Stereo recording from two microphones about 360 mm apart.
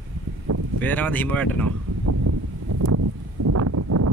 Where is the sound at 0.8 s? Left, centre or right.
Centre.